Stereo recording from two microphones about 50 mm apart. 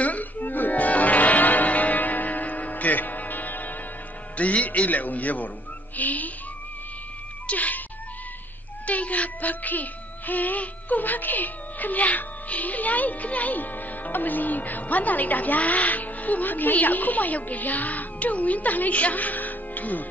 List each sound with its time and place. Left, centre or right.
0.0 s music: left
4.4 s speech: left
7.4 s cat: left
8.8 s speech: left